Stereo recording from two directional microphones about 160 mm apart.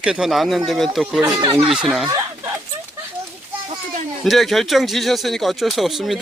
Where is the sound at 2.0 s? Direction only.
20° right (ahead or behind).